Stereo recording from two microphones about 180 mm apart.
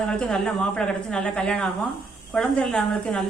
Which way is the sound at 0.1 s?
5° left (ahead or behind).